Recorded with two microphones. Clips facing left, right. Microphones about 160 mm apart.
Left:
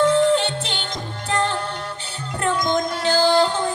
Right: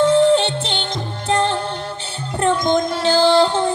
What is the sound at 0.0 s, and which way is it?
Music, 25° right (ahead or behind).